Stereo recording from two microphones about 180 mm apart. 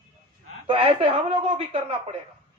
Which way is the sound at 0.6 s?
30° right (ahead or behind).